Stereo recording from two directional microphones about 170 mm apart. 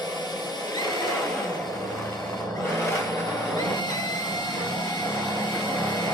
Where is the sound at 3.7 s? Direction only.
25° left (ahead or behind).